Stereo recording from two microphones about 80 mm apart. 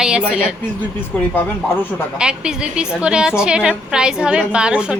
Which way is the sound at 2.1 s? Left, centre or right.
Centre.